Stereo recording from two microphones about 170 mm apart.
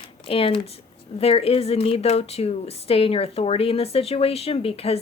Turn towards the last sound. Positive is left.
turn(degrees=35)  # may be behind; listen again after turning